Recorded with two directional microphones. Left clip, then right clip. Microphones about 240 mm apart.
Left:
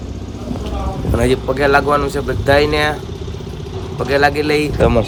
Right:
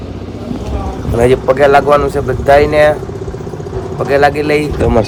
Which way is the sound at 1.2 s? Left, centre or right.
Centre.